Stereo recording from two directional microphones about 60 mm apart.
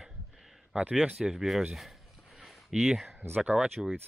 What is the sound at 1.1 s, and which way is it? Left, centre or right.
Speech, centre.